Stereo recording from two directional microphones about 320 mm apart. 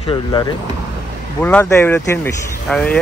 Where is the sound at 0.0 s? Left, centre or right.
Centre.